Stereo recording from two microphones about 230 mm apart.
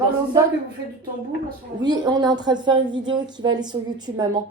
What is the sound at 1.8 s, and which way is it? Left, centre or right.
A woman's voice, centre.